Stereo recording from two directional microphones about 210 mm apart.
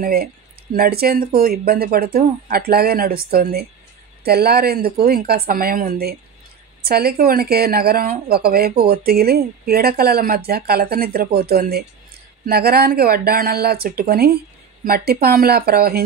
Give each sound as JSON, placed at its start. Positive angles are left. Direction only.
{"t": 0.0, "sound": "speech", "side_deg": -45}